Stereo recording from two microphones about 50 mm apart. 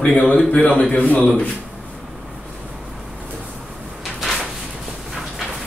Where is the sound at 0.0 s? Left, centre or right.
Left.